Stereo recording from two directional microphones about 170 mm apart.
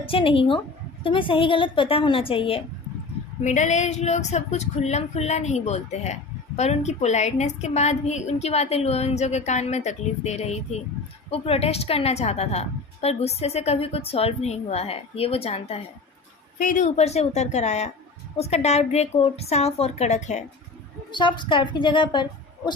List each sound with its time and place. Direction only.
0.0 s a woman's voice: 30° left (ahead or behind)
3.4 s a woman's voice: 45° left (ahead or behind)
16.6 s a woman's voice: 50° left (ahead or behind)
21.1 s a woman's voice: 25° left (ahead or behind)